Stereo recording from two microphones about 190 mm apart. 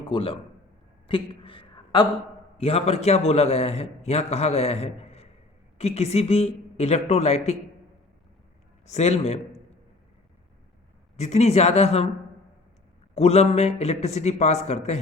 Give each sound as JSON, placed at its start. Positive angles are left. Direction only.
{"t": 0.1, "sound": "a man's voice", "side_deg": 30}
{"t": 8.9, "sound": "a man's voice", "side_deg": 35}
{"t": 11.2, "sound": "a man's voice", "side_deg": 35}
{"t": 13.1, "sound": "a man's voice", "side_deg": 35}